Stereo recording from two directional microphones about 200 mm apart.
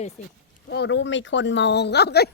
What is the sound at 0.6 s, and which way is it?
Speech, 60° left (ahead or behind).